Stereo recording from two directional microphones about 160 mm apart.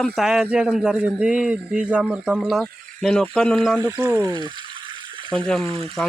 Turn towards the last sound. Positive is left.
turn(degrees=-35)  # may be behind; listen again after turning